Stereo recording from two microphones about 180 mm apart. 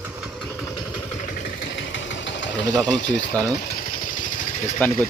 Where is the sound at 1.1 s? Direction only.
45° left (ahead or behind).